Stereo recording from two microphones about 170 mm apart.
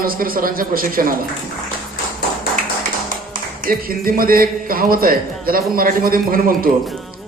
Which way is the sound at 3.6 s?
55° right (ahead or behind).